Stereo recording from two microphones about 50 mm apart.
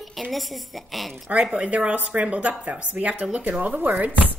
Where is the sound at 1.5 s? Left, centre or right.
Right.